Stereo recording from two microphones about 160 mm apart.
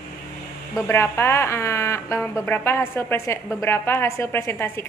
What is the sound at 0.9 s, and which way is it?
A woman's voice, 15° left (ahead or behind).